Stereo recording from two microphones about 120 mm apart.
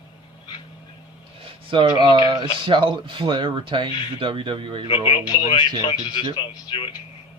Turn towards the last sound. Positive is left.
turn(degrees=45)  # may be behind; listen again after turning